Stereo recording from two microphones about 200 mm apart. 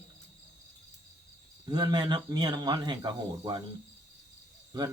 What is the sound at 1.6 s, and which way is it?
Speech, 20° right (ahead or behind).